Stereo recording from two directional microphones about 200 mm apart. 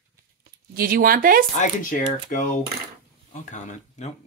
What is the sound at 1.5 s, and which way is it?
Speech, 40° left (ahead or behind).